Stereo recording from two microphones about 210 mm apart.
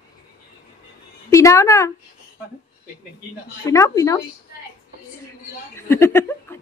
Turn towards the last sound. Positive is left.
turn(degrees=10)  # may be behind; listen again after turning